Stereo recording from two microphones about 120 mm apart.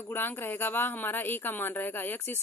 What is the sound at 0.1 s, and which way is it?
Speech, 15° left (ahead or behind).